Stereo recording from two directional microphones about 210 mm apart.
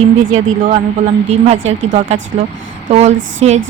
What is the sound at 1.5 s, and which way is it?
Speech, 65° right (ahead or behind).